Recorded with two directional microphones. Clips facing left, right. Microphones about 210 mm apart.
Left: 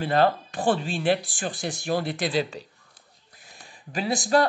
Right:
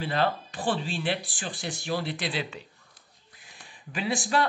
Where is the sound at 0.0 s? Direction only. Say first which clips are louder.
Left 5 dB; 50° left (ahead or behind).